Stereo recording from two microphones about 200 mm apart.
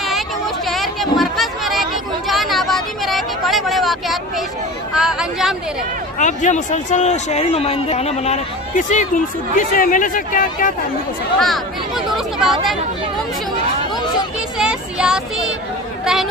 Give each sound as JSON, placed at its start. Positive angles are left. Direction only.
{"t": 0.7, "sound": "chatter", "side_deg": 0}
{"t": 4.9, "sound": "speech", "side_deg": 0}
{"t": 6.1, "sound": "speech", "side_deg": 40}
{"t": 11.3, "sound": "speech", "side_deg": 0}
{"t": 14.6, "sound": "a sound", "side_deg": -5}